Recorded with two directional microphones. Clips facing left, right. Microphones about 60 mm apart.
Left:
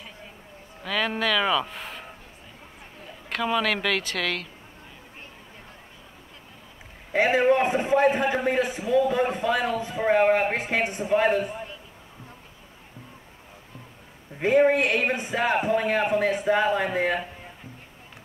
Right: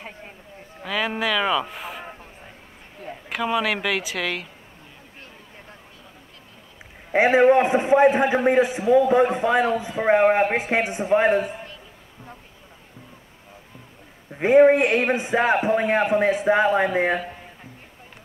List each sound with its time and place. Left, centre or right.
0.8 s speech: centre
3.3 s speech: centre
7.1 s a man's voice: right
14.4 s a man's voice: right